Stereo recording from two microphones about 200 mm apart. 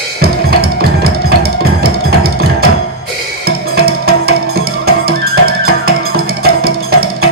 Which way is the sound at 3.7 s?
50° right (ahead or behind).